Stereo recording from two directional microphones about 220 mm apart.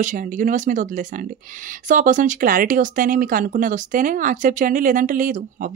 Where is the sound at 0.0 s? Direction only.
35° right (ahead or behind).